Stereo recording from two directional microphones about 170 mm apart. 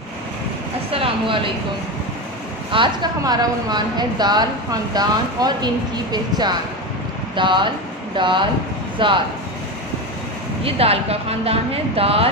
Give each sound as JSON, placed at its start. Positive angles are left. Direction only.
{"t": 0.9, "sound": "speech", "side_deg": -30}
{"t": 2.7, "sound": "a woman's voice", "side_deg": -25}
{"t": 10.6, "sound": "speech", "side_deg": -35}